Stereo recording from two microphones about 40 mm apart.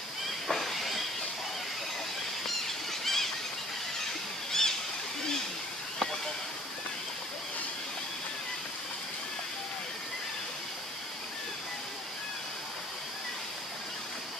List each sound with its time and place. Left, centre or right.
0.5 s train: centre
2.4 s squawk: centre
4.5 s a sound: centre